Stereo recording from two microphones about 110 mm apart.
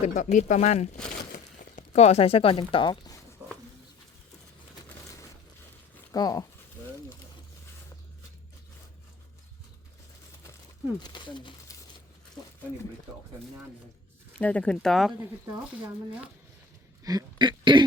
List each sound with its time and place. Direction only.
0.0 s speech: 90° left
1.9 s speech: 75° left (ahead or behind); by 3.2 s 40° left (ahead or behind)
3.4 s a sound: 15° right (ahead or behind)
6.1 s speech: 35° left (ahead or behind)
11.0 s speech: 45° left (ahead or behind)
14.3 s speech: 10° left (ahead or behind)
17.0 s speech: 35° right (ahead or behind)